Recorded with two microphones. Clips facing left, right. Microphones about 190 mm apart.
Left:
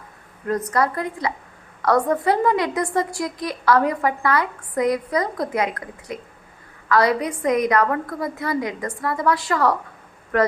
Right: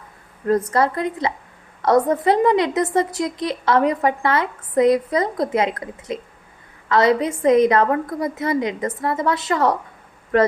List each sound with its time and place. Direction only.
0.4 s a woman's voice: 30° right (ahead or behind)